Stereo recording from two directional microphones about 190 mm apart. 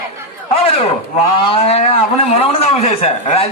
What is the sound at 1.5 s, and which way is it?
A man's voice, 30° left (ahead or behind).